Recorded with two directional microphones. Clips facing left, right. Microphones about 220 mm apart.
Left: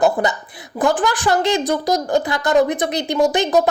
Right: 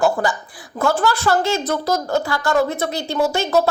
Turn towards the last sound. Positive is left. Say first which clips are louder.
# left 2 dB
turn(degrees=15)  # may be behind; listen again after turning